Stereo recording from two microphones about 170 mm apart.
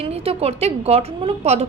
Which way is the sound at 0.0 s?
35° right (ahead or behind).